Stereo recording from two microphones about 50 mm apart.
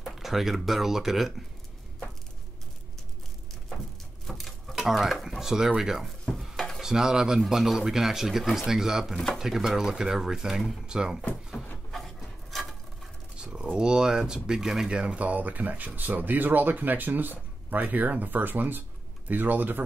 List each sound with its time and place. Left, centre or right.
0.0 s speech: centre
4.3 s a sound: centre
5.4 s speech: centre
6.3 s dishes: centre
6.8 s speech: centre
9.1 s speech: centre
9.4 s speech: centre
11.9 s a sound: centre
13.4 s typing: centre
13.7 s speech: centre
14.9 s speech: right